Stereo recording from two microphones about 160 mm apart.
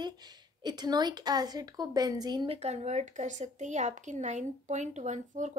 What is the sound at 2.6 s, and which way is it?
Speech, 45° right (ahead or behind).